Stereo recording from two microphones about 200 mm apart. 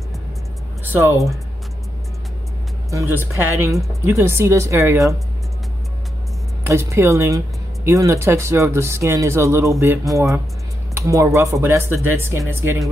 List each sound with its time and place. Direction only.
0.8 s speech: 10° right (ahead or behind)
2.9 s speech: 15° right (ahead or behind)
6.6 s speech: 15° right (ahead or behind)